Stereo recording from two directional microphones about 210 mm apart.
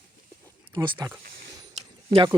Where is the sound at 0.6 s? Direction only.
20° right (ahead or behind).